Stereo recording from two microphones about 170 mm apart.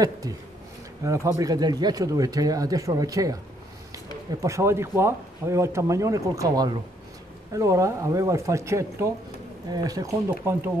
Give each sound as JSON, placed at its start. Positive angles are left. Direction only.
{"t": 1.0, "sound": "speech", "side_deg": -15}